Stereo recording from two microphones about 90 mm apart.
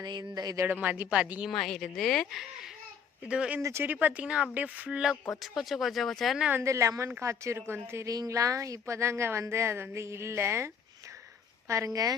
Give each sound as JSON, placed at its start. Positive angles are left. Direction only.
{"t": 0.0, "sound": "speech", "side_deg": -50}
{"t": 0.7, "sound": "a woman's voice", "side_deg": -15}
{"t": 1.5, "sound": "a woman's voice", "side_deg": 5}
{"t": 3.6, "sound": "a woman's voice", "side_deg": -30}
{"t": 4.0, "sound": "a woman's voice", "side_deg": -15}
{"t": 6.5, "sound": "a woman's voice", "side_deg": -35}
{"t": 8.0, "sound": "a woman's voice", "side_deg": -40}